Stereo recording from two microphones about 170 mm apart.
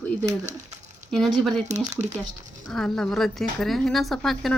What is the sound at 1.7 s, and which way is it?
Speech, 45° right (ahead or behind).